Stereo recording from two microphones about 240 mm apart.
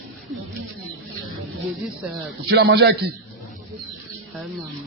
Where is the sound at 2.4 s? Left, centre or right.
Right.